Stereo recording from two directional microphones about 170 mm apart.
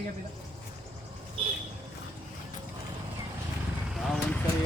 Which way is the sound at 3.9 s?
Centre (ahead or behind).